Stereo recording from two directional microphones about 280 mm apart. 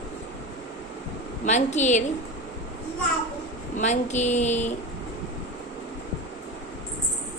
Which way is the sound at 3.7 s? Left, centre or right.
Left.